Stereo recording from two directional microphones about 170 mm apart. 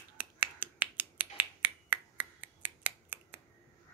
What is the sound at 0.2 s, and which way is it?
Finger snapping, 10° right (ahead or behind).